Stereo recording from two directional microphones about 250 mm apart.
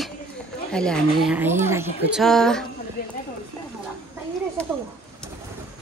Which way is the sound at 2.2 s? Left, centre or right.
Centre.